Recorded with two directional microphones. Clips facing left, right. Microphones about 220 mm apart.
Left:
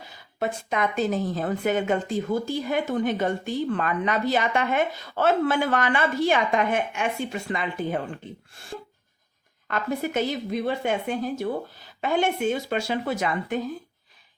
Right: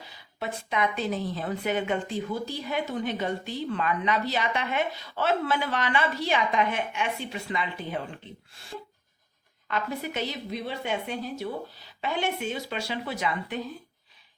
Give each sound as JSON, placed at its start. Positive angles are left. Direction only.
{"t": 0.3, "sound": "a woman's voice", "side_deg": 45}
{"t": 9.6, "sound": "a woman's voice", "side_deg": 45}